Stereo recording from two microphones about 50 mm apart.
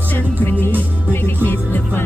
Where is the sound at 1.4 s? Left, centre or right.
Left.